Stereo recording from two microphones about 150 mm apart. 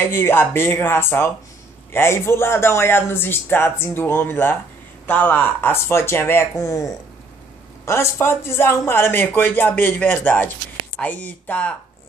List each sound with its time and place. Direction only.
0.0 s speech: 15° left (ahead or behind)